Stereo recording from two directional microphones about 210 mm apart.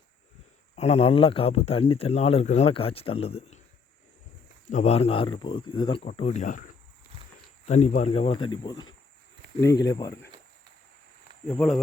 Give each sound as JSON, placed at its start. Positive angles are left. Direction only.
{"t": 0.8, "sound": "speech", "side_deg": 30}
{"t": 4.7, "sound": "speech", "side_deg": 30}
{"t": 11.4, "sound": "speech", "side_deg": 0}